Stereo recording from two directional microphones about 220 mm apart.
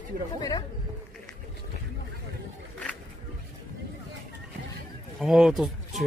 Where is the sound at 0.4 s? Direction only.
15° left (ahead or behind).